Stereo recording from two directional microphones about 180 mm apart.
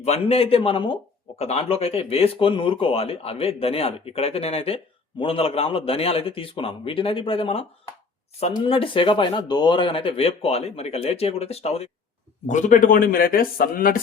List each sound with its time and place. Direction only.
0.0 s a man's voice: 35° left (ahead or behind); by 14.0 s 55° left (ahead or behind)